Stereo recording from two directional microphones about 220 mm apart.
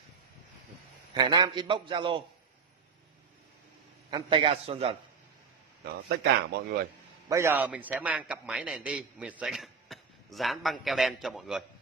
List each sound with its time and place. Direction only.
1.1 s a man's voice: 20° right (ahead or behind)
4.1 s a man's voice: 20° right (ahead or behind)
5.9 s speech: 50° right (ahead or behind)
7.2 s a man's voice: 10° right (ahead or behind)